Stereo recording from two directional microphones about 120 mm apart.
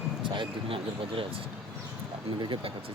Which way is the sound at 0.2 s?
45° right (ahead or behind).